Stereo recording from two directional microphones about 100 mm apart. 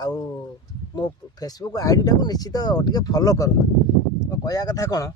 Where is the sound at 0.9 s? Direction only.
40° left (ahead or behind).